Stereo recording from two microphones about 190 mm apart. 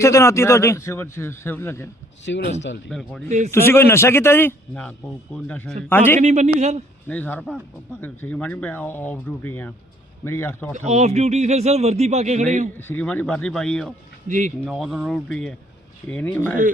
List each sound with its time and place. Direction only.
0.0 s a man's voice: 15° left (ahead or behind)
2.2 s speech: 70° left (ahead or behind)
2.9 s speech: centre (ahead or behind)
3.2 s a man's voice: 40° right (ahead or behind)
3.5 s a man's voice: 10° left (ahead or behind)
6.1 s a man's voice: 35° right (ahead or behind)
7.1 s a man's voice: 10° left (ahead or behind)
10.8 s a man's voice: 35° right (ahead or behind)
12.9 s speech: 10° left (ahead or behind)
14.3 s a man's voice: 40° right (ahead or behind)
14.6 s a man's voice: centre (ahead or behind)